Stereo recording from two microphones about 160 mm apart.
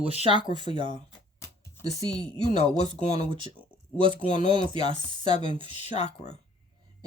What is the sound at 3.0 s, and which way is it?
Speech, 40° left (ahead or behind).